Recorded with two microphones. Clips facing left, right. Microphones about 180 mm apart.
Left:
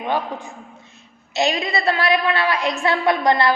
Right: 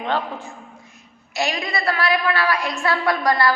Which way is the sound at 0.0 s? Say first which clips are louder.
Left 1 dB; 10° left (ahead or behind).